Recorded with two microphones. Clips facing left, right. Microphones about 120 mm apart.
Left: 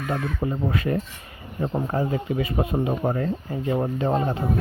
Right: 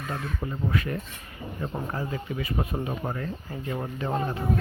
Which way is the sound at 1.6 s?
25° left (ahead or behind).